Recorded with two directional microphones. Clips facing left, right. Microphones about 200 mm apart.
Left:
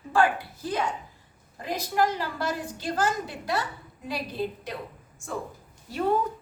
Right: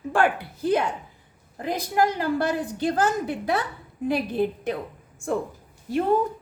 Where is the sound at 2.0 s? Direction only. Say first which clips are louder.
Right 4 dB; 50° right (ahead or behind).